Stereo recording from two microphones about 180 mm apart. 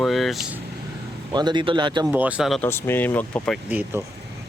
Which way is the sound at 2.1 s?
10° right (ahead or behind).